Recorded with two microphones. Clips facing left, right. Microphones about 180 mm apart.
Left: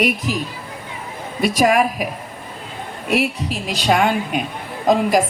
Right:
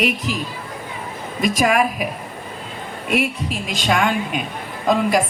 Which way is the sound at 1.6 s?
45° left (ahead or behind).